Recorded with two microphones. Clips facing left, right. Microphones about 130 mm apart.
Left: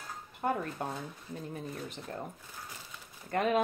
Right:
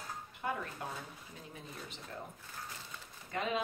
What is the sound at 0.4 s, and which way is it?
Speech, 45° left (ahead or behind).